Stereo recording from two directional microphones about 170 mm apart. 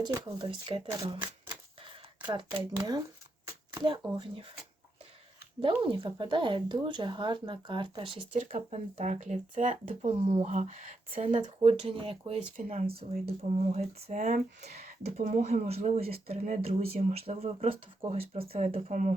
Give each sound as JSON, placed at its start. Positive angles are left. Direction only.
{"t": 0.0, "sound": "speech", "side_deg": -25}
{"t": 5.8, "sound": "speech", "side_deg": -30}
{"t": 18.9, "sound": "speech", "side_deg": -50}